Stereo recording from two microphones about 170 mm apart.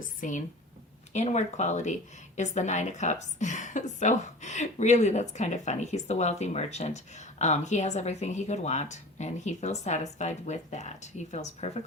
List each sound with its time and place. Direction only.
0.0 s a woman's voice: 50° left (ahead or behind)